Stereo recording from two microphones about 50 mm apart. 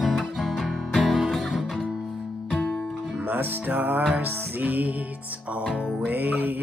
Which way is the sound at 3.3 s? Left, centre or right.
Right.